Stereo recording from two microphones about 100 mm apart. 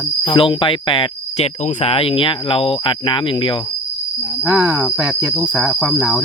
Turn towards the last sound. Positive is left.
turn(degrees=-5)  # may be behind; listen again after turning